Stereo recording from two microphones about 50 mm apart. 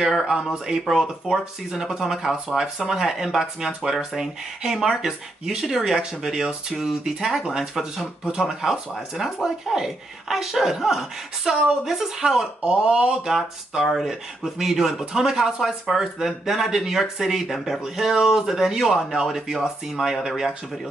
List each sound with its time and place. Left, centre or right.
0.2 s speech: centre
12.6 s speech: centre
13.4 s speech: centre